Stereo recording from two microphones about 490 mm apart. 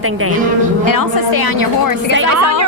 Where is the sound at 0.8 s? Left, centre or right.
Left.